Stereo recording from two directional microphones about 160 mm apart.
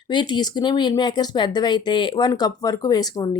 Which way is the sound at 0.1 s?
30° left (ahead or behind).